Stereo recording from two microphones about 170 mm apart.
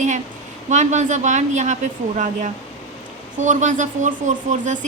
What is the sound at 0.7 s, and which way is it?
A woman's voice, 45° right (ahead or behind).